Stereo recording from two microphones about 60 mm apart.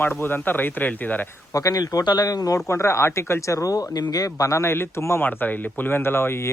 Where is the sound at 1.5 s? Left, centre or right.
Left.